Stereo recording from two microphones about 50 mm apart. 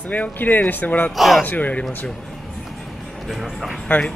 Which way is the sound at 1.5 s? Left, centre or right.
Left.